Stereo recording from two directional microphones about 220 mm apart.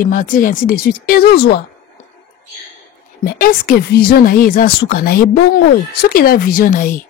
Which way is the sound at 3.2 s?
40° left (ahead or behind).